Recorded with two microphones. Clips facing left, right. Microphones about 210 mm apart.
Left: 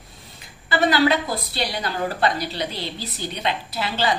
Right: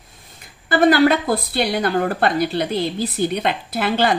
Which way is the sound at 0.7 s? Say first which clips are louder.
Right 5 dB; 50° right (ahead or behind).